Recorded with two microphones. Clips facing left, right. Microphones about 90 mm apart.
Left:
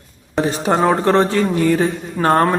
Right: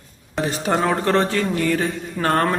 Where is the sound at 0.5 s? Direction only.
30° left (ahead or behind).